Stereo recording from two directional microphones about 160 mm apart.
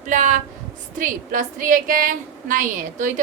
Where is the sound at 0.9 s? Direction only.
55° right (ahead or behind).